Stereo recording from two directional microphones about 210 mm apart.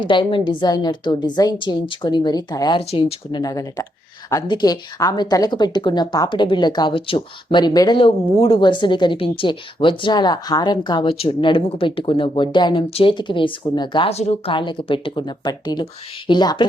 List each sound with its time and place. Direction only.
0.0 s a woman's voice: 25° left (ahead or behind)